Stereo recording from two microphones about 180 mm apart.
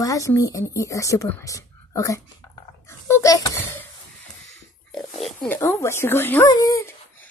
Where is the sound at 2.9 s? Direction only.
15° left (ahead or behind).